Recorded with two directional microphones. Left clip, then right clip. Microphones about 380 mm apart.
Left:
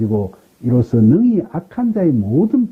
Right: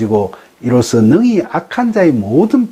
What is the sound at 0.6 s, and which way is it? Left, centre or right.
Speech, centre.